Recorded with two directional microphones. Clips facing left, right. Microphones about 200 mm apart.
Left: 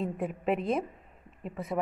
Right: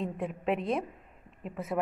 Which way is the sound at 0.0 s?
Centre (ahead or behind).